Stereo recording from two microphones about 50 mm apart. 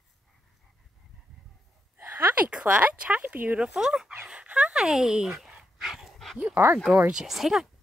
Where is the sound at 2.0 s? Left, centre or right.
Right.